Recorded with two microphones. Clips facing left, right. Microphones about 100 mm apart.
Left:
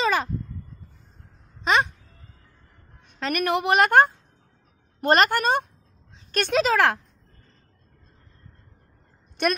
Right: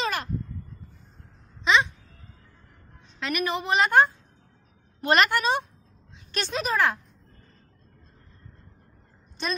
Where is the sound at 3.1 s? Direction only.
40° left (ahead or behind).